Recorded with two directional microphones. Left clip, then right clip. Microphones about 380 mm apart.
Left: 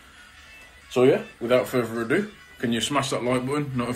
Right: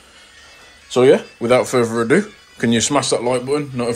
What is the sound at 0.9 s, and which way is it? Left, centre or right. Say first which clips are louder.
A man's voice: right 7 dB; centre.